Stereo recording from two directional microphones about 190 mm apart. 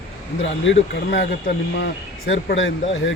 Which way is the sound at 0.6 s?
70° left (ahead or behind).